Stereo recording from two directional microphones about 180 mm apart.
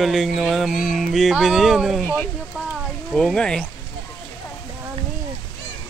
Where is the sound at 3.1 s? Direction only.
Centre (ahead or behind).